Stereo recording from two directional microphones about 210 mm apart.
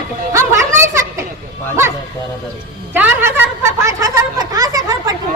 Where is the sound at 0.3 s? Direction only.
15° right (ahead or behind).